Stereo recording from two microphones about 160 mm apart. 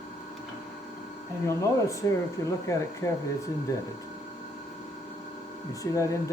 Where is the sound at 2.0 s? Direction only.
15° left (ahead or behind).